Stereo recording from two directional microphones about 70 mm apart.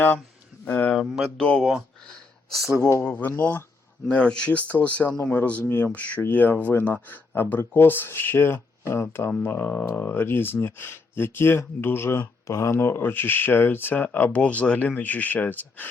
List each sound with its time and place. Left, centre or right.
0.6 s speech: left
0.9 s speech: centre
1.4 s speech: centre
3.0 s speech: left
4.1 s speech: centre; by 12.3 s left
12.5 s speech: left